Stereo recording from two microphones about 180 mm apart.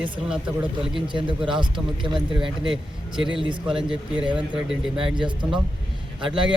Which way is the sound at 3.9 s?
5° right (ahead or behind).